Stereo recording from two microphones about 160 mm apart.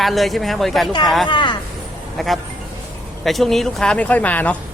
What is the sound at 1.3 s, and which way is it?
Speech, 30° left (ahead or behind).